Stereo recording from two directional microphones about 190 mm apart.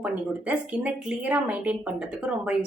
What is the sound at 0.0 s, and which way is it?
A woman's voice, 5° right (ahead or behind).